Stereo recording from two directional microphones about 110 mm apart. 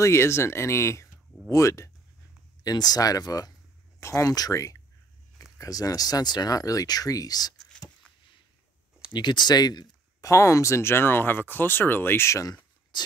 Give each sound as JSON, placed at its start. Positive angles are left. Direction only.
{"t": 0.0, "sound": "speech", "side_deg": 25}
{"t": 7.7, "sound": "a sound", "side_deg": 10}
{"t": 9.1, "sound": "speech", "side_deg": 45}